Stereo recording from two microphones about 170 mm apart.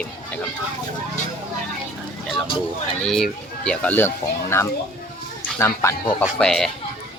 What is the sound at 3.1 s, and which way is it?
Speech, centre (ahead or behind).